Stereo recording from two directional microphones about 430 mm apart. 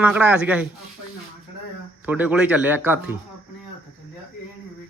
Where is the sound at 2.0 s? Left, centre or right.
Centre.